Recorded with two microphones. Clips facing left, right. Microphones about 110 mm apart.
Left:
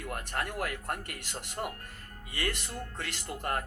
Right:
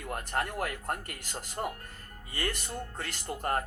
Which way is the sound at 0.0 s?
30° right (ahead or behind).